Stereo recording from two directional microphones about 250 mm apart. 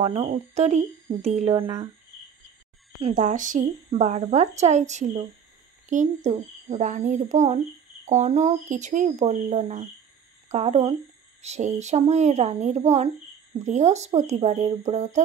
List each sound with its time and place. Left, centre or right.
0.0 s speech: right
3.0 s speech: right